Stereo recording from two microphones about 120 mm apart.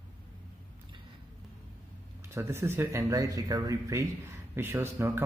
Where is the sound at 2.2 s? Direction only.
25° right (ahead or behind).